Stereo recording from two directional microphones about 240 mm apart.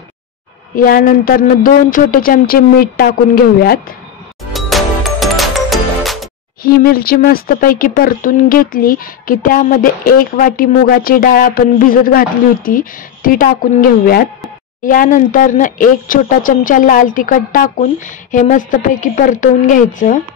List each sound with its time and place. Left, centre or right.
0.7 s speech: left
4.5 s music: centre
6.6 s speech: left